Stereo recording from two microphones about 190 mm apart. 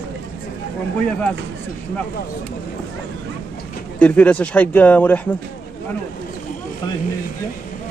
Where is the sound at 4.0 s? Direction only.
10° left (ahead or behind).